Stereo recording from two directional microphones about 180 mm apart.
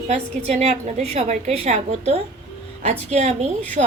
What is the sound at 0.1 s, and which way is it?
A woman's voice, 35° right (ahead or behind).